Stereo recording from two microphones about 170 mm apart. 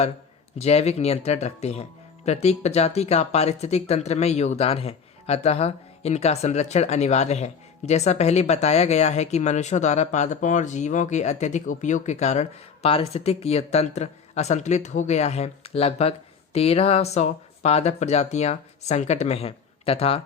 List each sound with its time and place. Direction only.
0.6 s speech: 40° left (ahead or behind)